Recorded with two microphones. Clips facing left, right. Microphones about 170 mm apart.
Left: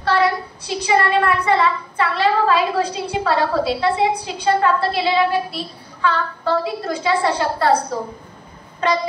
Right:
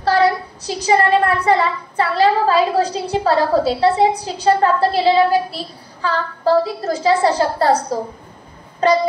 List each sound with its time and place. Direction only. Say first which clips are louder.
0.0 s a woman's voice: right 3 dB; 40° right (ahead or behind)